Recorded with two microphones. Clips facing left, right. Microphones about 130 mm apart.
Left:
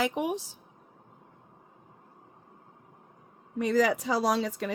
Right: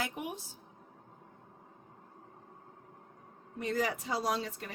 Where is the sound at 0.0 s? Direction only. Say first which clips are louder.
Left 9 dB; 90° left.